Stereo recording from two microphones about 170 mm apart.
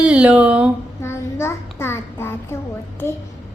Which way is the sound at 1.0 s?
15° left (ahead or behind).